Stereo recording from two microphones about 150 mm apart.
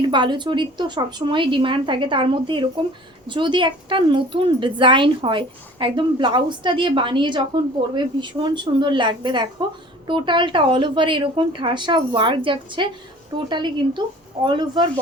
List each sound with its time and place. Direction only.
0.0 s a woman's voice: 30° right (ahead or behind)